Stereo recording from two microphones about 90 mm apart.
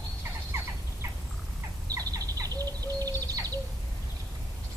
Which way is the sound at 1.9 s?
45° right (ahead or behind).